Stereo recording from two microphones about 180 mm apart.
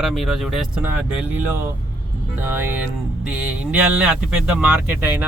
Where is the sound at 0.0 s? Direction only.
Centre (ahead or behind).